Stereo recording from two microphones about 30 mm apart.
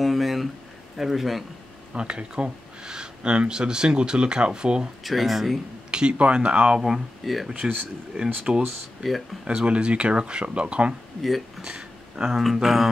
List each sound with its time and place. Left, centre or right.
0.0 s a sound: centre
0.9 s speech: centre
2.0 s speech: right
5.0 s speech: centre
5.9 s a sound: right
6.1 s speech: right
6.8 s speech: centre
8.5 s speech: right
9.0 s speech: centre
9.4 s speech: right
12.2 s speech: centre